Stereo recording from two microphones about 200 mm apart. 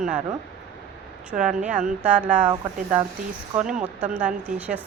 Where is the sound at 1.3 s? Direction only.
5° right (ahead or behind).